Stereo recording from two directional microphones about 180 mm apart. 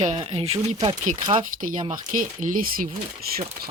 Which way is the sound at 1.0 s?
45° right (ahead or behind).